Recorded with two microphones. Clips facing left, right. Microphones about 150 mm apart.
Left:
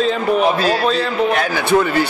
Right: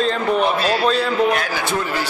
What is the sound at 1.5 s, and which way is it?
Speech, 60° left (ahead or behind).